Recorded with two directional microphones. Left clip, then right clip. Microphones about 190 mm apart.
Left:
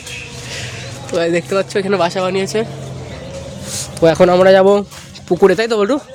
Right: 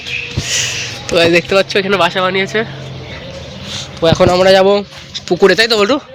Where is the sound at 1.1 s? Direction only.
10° right (ahead or behind).